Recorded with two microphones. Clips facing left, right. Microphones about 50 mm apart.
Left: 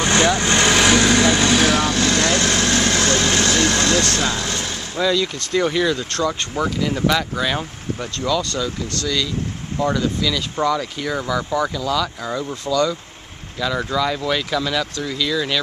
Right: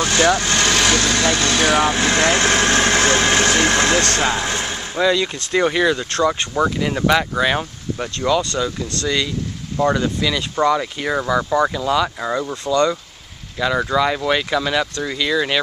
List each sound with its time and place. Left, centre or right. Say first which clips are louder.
0.0 s vehicle: even; left
0.4 s speech: left 2 dB; centre
1.8 s speech: right 2 dB; centre
13.6 s speech: right 3 dB; centre